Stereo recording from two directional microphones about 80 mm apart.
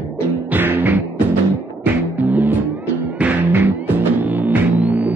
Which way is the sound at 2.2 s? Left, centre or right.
Right.